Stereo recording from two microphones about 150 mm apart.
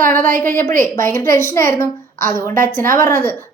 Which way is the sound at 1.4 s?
15° left (ahead or behind).